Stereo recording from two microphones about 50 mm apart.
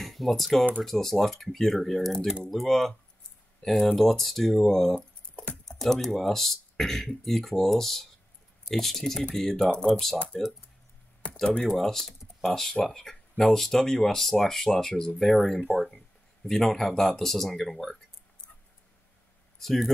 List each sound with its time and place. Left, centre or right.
0.0 s speech: centre
4.9 s a sound: left
5.7 s speech: centre
10.1 s speech: left
11.2 s typing: left
11.6 s speech: centre
12.1 s computer keyboard: centre
12.8 s speech: centre
19.6 s speech: centre